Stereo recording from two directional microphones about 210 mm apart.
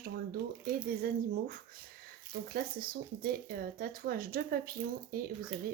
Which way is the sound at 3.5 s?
45° right (ahead or behind).